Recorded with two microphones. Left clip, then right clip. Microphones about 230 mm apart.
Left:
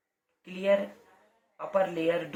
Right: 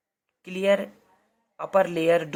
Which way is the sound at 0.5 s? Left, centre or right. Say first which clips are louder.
Right 4 dB; right.